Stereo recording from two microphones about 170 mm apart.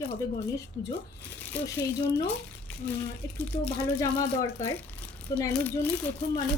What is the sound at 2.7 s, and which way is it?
Speech, 10° left (ahead or behind).